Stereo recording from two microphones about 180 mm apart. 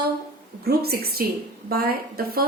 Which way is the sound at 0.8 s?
60° right (ahead or behind).